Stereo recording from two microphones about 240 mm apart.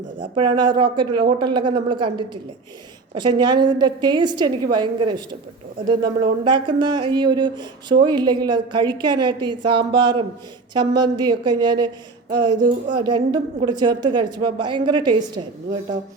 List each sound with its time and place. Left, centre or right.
0.3 s a woman's voice: centre
3.2 s a woman's voice: centre
12.5 s music: right
13.0 s a woman's voice: centre